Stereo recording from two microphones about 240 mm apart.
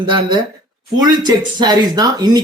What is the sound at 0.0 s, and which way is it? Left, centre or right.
Speech, centre.